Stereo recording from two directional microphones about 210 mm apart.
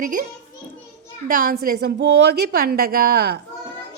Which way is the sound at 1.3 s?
40° right (ahead or behind).